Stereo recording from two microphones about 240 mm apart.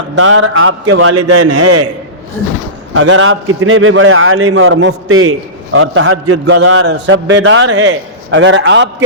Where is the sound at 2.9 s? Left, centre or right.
Right.